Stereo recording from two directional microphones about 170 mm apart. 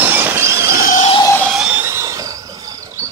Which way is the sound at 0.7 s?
55° left (ahead or behind).